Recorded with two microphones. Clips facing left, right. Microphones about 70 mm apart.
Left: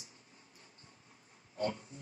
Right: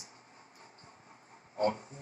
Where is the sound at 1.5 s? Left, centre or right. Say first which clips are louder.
Right 6 dB; right.